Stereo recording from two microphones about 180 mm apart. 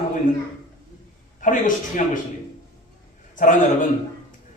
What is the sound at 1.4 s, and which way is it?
Speech, 45° left (ahead or behind).